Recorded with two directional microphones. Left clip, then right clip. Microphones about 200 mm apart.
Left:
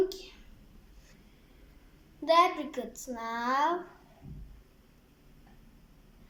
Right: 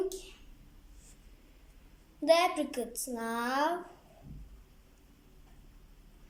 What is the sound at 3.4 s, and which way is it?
Speech, 15° left (ahead or behind).